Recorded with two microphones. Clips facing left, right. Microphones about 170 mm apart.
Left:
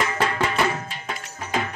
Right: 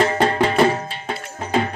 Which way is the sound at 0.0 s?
35° right (ahead or behind).